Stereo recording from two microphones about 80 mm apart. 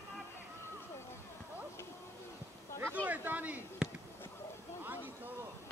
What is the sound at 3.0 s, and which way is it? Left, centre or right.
Speech, right.